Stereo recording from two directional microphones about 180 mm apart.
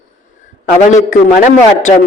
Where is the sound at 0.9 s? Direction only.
45° left (ahead or behind).